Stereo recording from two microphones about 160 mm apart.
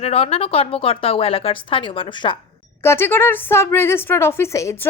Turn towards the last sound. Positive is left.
turn(degrees=20)  # may be behind; listen again after turning